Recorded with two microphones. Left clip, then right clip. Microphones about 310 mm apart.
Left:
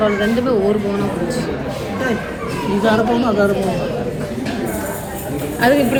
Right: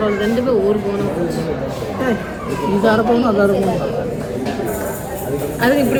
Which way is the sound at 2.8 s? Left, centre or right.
Centre.